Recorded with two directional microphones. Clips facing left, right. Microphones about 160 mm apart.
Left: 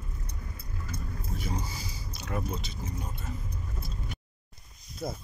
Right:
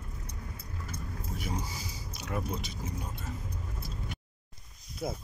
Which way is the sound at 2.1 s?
15° right (ahead or behind).